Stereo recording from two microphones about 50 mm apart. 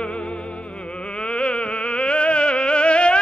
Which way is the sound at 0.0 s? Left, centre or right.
Left.